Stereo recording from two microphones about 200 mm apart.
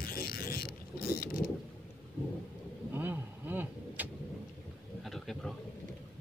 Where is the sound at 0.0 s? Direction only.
50° left (ahead or behind).